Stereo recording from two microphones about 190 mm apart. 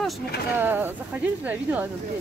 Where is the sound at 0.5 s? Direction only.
10° right (ahead or behind).